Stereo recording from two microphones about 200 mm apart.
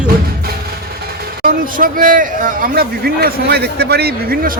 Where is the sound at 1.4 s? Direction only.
45° right (ahead or behind).